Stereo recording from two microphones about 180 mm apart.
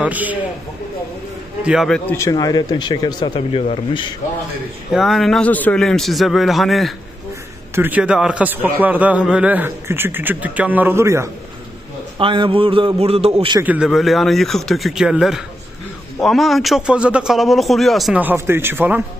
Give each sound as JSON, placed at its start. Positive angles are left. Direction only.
{"t": 0.0, "sound": "a man's voice", "side_deg": -10}
{"t": 1.6, "sound": "a man's voice", "side_deg": -5}
{"t": 2.0, "sound": "speech", "side_deg": 15}
{"t": 4.9, "sound": "a man's voice", "side_deg": 0}
{"t": 7.7, "sound": "a man's voice", "side_deg": -10}
{"t": 12.2, "sound": "a sound", "side_deg": -30}
{"t": 13.6, "sound": "a man's voice", "side_deg": -5}